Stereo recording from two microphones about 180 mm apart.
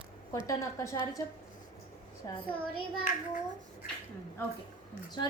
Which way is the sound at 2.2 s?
25° left (ahead or behind).